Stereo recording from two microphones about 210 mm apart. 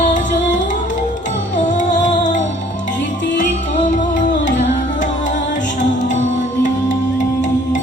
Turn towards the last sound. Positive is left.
turn(degrees=35)  # may be behind; listen again after turning